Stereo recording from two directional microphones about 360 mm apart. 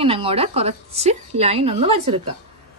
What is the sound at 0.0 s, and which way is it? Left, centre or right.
A woman's voice, centre.